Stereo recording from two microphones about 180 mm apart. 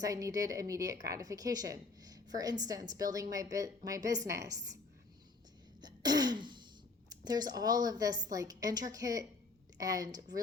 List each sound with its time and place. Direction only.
0.0 s a woman's voice: 20° right (ahead or behind)
5.8 s throat clearing: 25° right (ahead or behind)
7.1 s a woman's voice: 20° right (ahead or behind)